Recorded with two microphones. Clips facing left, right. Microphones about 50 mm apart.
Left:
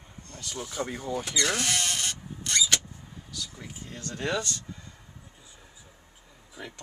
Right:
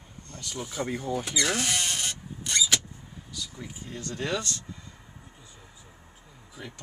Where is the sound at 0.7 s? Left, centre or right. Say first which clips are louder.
Right 2 dB; centre.